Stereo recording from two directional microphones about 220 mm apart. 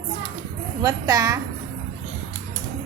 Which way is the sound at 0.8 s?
15° right (ahead or behind).